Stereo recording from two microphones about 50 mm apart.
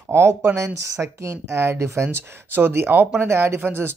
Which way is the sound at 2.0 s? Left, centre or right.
Right.